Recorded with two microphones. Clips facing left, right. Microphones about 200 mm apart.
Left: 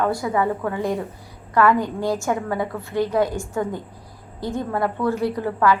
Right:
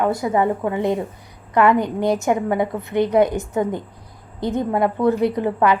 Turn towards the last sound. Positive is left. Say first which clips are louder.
# right 2 dB
turn(degrees=-20)  # may be behind; listen again after turning